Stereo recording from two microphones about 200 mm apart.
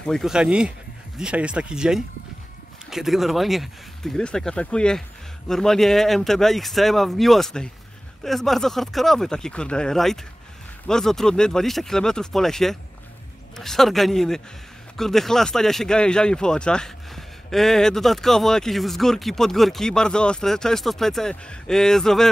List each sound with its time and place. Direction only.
0.0 s speech: centre (ahead or behind)